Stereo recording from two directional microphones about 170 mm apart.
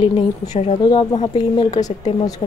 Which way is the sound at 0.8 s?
25° left (ahead or behind).